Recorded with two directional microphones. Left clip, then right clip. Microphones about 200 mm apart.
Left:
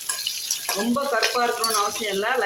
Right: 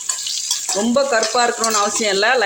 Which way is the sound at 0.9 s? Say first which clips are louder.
Right 6 dB; 50° right (ahead or behind).